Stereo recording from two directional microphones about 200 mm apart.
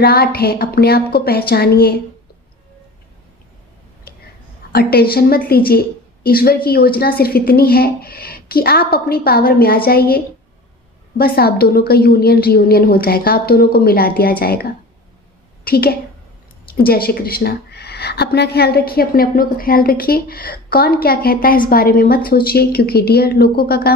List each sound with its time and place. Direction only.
0.0 s a woman's voice: 50° left (ahead or behind)
4.7 s a woman's voice: 50° left (ahead or behind)
15.6 s a woman's voice: 50° left (ahead or behind)